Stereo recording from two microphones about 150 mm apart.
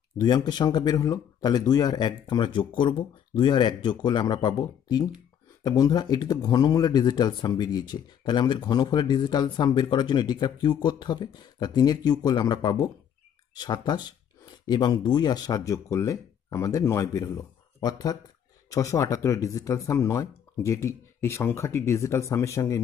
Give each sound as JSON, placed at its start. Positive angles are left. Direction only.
{"t": 0.2, "sound": "speech", "side_deg": 25}